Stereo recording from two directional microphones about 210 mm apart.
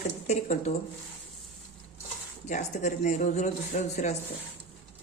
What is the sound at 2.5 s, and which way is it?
Speech, 35° left (ahead or behind).